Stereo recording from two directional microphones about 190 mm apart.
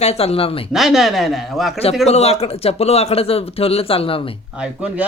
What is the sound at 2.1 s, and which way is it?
Speech, 35° left (ahead or behind).